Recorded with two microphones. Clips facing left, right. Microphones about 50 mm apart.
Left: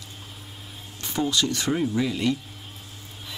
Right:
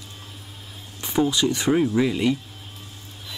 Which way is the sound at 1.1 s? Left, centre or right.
Centre.